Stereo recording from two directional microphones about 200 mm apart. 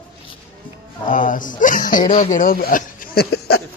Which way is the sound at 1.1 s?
40° left (ahead or behind).